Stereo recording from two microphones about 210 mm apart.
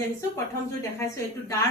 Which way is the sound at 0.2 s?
15° left (ahead or behind).